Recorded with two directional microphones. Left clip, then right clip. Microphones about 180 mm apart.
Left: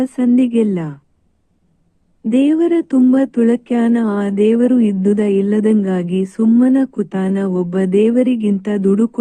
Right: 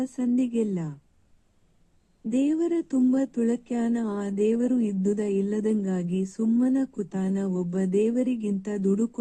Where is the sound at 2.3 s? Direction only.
25° left (ahead or behind).